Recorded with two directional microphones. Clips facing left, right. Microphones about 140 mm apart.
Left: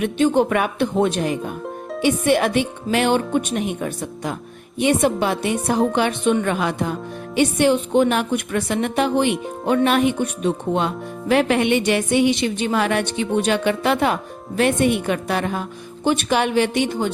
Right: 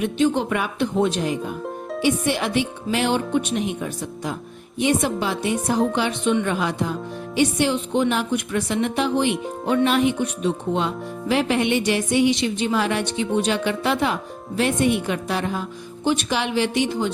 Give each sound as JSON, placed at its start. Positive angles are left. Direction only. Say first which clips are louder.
{"t": 0.0, "sound": "speech", "louder": "left 3 dB", "side_deg": 55}